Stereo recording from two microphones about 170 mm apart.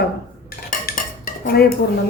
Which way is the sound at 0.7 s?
55° left (ahead or behind).